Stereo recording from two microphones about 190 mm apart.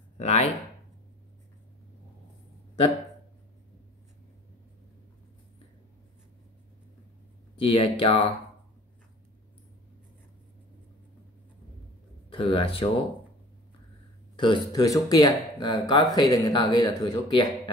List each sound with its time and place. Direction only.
0.2 s speech: 35° left (ahead or behind)
7.5 s speech: 30° left (ahead or behind)
12.3 s speech: 30° left (ahead or behind)
14.3 s a sound: 25° left (ahead or behind)
14.7 s speech: 20° left (ahead or behind)